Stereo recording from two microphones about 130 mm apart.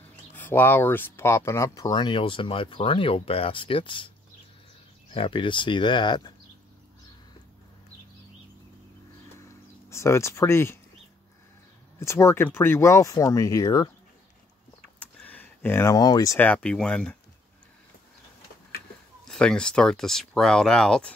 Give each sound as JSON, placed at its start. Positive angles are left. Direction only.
{"t": 0.4, "sound": "speech", "side_deg": 15}
{"t": 5.1, "sound": "speech", "side_deg": 40}
{"t": 9.4, "sound": "a sound", "side_deg": 20}
{"t": 12.0, "sound": "speech", "side_deg": 20}
{"t": 15.0, "sound": "a sound", "side_deg": 10}
{"t": 16.3, "sound": "speech", "side_deg": 10}
{"t": 19.2, "sound": "speech", "side_deg": 5}